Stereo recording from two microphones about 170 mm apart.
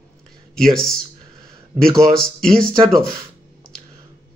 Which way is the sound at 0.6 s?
5° left (ahead or behind).